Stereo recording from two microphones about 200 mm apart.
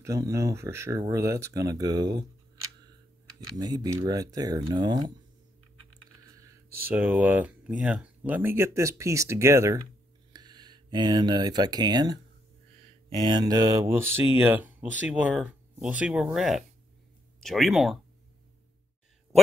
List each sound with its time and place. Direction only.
0.0 s speech: 15° right (ahead or behind)
6.8 s speech: 10° right (ahead or behind)
13.2 s speech: 20° right (ahead or behind); by 17.9 s centre (ahead or behind)